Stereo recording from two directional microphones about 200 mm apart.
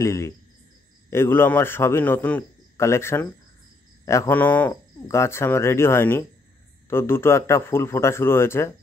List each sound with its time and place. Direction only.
0.0 s speech: 15° left (ahead or behind)